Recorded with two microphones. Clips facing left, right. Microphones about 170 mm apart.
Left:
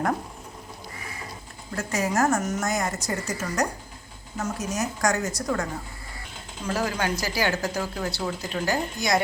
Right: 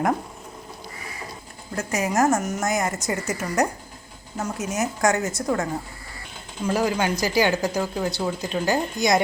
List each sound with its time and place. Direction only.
1.7 s a woman's voice: 20° right (ahead or behind)
6.7 s speech: 15° right (ahead or behind)